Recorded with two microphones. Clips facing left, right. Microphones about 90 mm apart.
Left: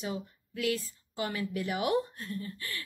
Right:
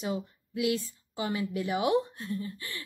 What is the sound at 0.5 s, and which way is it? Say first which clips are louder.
Speech: right 3 dB; 20° right (ahead or behind).